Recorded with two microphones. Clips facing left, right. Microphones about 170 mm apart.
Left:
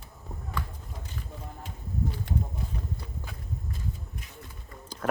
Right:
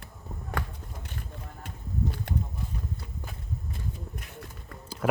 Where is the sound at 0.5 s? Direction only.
65° right (ahead or behind).